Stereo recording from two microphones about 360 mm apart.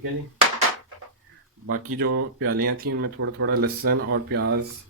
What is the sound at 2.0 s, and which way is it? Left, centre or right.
Speech, right.